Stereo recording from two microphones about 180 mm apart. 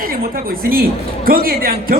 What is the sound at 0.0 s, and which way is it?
A man's voice, 55° right (ahead or behind).